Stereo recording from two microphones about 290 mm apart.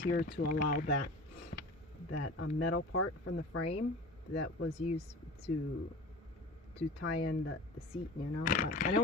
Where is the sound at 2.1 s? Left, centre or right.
Left.